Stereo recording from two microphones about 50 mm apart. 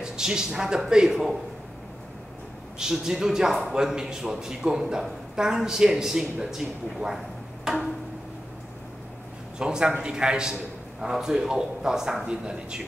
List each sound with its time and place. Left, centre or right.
0.0 s speech: centre
2.8 s speech: centre
9.6 s speech: centre